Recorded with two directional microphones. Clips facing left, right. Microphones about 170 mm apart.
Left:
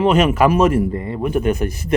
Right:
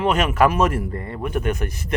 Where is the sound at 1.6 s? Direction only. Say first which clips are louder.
Left 6 dB; 35° left (ahead or behind).